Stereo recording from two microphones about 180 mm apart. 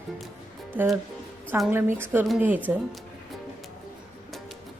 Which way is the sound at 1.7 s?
15° right (ahead or behind).